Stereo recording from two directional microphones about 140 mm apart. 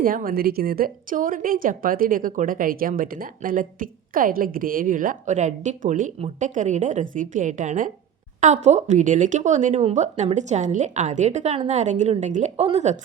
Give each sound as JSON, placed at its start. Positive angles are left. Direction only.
{"t": 0.0, "sound": "a woman's voice", "side_deg": -90}